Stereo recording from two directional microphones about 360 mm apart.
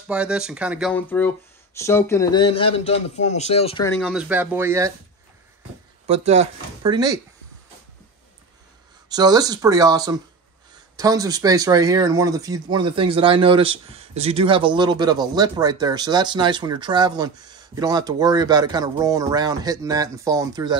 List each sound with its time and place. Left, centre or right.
0.1 s speech: centre
6.0 s speech: centre
9.1 s speech: centre